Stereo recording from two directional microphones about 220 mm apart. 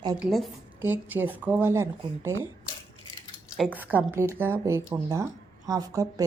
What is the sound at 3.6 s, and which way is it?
Speech, 5° right (ahead or behind).